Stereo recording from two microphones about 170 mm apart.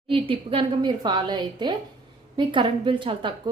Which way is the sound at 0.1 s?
30° right (ahead or behind).